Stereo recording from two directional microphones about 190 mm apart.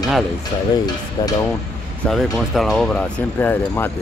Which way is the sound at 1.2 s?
20° left (ahead or behind).